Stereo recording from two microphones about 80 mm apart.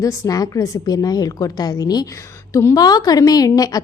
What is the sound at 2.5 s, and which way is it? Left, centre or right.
Speech, left.